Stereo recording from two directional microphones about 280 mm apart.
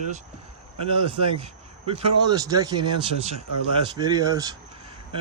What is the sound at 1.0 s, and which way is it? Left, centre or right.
Speech, centre.